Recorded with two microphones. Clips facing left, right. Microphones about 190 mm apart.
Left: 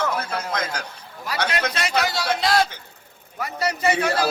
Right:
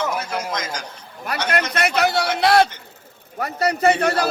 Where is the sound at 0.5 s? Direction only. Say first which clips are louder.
Left 1 dB; 60° left (ahead or behind).